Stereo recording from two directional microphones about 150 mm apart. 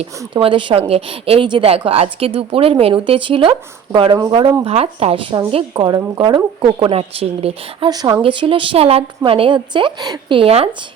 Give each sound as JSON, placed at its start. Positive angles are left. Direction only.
{"t": 0.0, "sound": "a woman's voice", "side_deg": -35}
{"t": 4.6, "sound": "a woman's voice", "side_deg": -40}
{"t": 7.9, "sound": "a woman's voice", "side_deg": -25}